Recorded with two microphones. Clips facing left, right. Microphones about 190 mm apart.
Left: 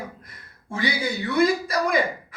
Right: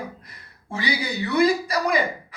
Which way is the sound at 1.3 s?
50° left (ahead or behind).